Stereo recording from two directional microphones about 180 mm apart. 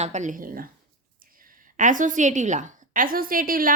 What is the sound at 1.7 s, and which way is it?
A woman's voice, 45° right (ahead or behind).